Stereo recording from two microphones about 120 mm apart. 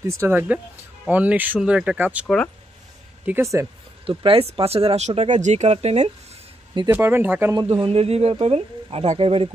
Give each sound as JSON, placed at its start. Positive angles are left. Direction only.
{"t": 0.2, "sound": "speech", "side_deg": -15}
{"t": 2.2, "sound": "speech", "side_deg": 10}
{"t": 3.3, "sound": "speech", "side_deg": -20}
{"t": 4.0, "sound": "speech", "side_deg": -45}
{"t": 6.9, "sound": "speech", "side_deg": -20}
{"t": 7.8, "sound": "speech", "side_deg": -60}